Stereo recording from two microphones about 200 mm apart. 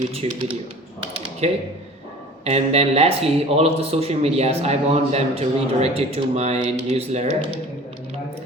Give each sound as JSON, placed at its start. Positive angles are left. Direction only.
{"t": 0.1, "sound": "speech", "side_deg": -30}